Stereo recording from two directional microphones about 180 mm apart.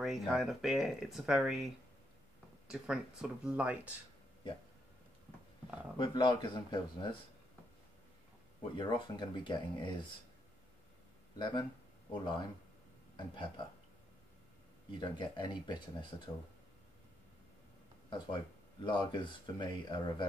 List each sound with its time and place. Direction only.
0.0 s speech: centre (ahead or behind)
2.7 s speech: 5° right (ahead or behind)
5.9 s speech: 25° left (ahead or behind)
8.7 s speech: 25° left (ahead or behind)
11.3 s speech: 25° left (ahead or behind)
14.9 s speech: 25° left (ahead or behind)
18.1 s speech: 25° left (ahead or behind)